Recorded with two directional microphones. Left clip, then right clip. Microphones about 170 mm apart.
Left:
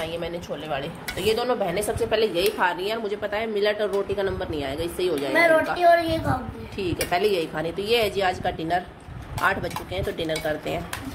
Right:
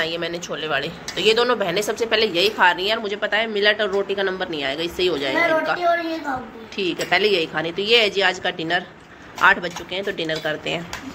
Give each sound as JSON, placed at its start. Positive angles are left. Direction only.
{"t": 0.0, "sound": "speech", "side_deg": -5}
{"t": 6.8, "sound": "speech", "side_deg": 0}